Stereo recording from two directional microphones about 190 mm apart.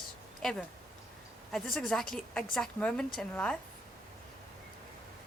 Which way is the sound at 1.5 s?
Centre (ahead or behind).